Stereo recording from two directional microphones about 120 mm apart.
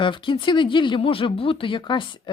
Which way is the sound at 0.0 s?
45° left (ahead or behind).